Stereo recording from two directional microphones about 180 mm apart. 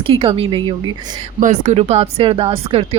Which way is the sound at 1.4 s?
45° right (ahead or behind).